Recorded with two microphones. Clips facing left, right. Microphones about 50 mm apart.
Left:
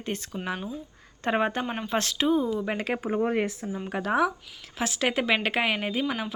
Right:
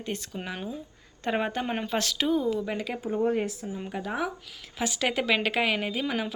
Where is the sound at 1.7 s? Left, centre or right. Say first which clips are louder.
Right 1 dB; centre.